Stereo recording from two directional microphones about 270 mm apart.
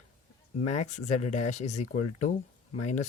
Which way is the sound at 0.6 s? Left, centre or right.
Left.